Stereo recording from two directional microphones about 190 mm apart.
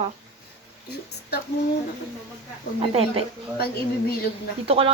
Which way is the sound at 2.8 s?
30° right (ahead or behind).